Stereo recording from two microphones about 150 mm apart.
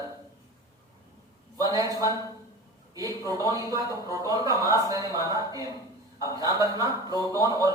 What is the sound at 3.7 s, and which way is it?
A man's voice, 25° right (ahead or behind).